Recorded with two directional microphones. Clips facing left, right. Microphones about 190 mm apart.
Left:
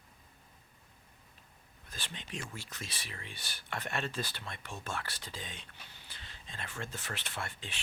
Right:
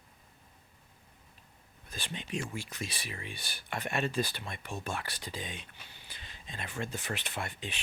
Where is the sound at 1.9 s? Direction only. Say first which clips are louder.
Right 6 dB; 15° right (ahead or behind).